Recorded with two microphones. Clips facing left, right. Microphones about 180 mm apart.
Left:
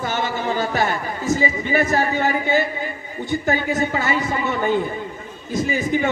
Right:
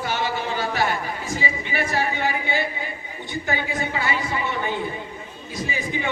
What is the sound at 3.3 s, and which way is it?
A man's voice, 40° left (ahead or behind).